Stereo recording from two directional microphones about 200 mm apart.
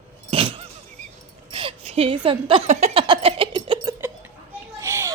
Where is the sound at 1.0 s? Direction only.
40° right (ahead or behind).